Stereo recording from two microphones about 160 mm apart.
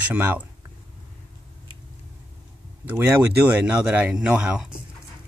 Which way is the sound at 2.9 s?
10° right (ahead or behind).